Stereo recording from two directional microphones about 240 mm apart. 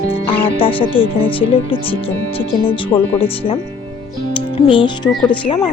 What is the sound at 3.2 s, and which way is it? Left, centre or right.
Speech, left.